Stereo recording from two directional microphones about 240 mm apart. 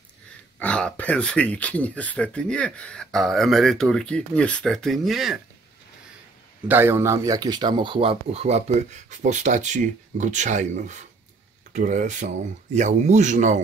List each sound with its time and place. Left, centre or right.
0.6 s speech: centre
6.7 s speech: centre; by 13.6 s right